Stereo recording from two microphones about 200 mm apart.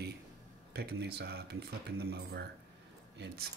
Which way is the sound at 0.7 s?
55° right (ahead or behind).